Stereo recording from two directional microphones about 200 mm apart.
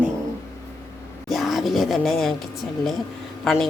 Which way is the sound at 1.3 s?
Centre (ahead or behind).